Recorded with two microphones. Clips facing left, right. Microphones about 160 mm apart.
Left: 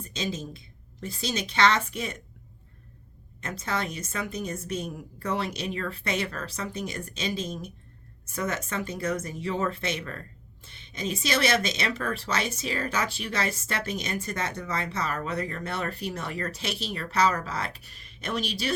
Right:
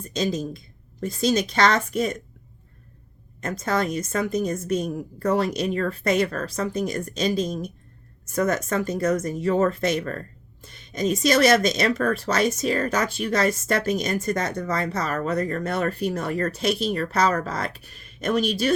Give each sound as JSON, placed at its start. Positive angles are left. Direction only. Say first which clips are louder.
{"t": 0.1, "sound": "speech", "louder": "right 8 dB", "side_deg": -40}
{"t": 3.6, "sound": "speech", "louder": "right 7 dB", "side_deg": -40}